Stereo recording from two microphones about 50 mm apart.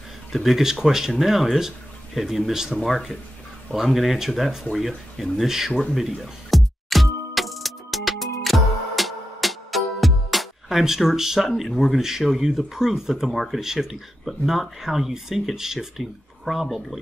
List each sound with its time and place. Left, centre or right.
0.3 s speech: centre
5.9 s music: centre
13.3 s speech: centre
13.6 s speech: centre